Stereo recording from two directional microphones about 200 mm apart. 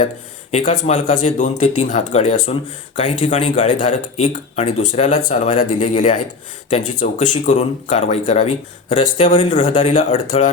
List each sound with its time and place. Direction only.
0.5 s speech: 40° left (ahead or behind)
9.0 s speech: 25° left (ahead or behind)
9.5 s speech: 40° left (ahead or behind)